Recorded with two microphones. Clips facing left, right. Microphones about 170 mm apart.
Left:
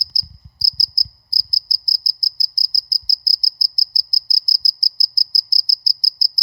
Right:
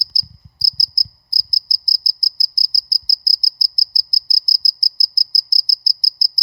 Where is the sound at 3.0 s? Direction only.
20° right (ahead or behind).